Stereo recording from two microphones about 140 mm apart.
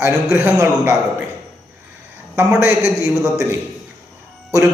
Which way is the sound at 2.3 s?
15° right (ahead or behind).